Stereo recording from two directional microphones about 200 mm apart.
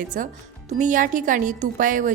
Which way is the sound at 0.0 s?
40° right (ahead or behind).